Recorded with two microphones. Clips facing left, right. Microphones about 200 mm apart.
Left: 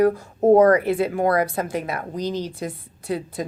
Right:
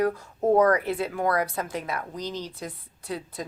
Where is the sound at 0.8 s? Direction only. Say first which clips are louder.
Left 7 dB; 10° left (ahead or behind).